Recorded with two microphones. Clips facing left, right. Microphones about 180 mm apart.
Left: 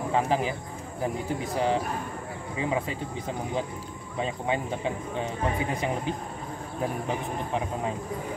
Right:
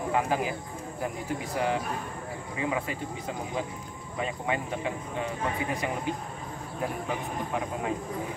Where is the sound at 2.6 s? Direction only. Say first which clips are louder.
Left 2 dB; 25° left (ahead or behind).